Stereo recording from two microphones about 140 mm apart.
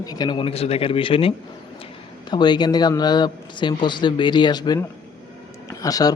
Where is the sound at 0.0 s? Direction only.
30° left (ahead or behind).